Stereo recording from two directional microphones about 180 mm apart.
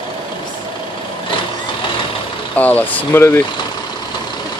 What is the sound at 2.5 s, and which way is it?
Speech, 10° left (ahead or behind).